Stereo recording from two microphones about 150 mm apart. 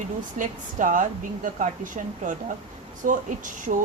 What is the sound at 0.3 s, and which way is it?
Speech, 60° right (ahead or behind).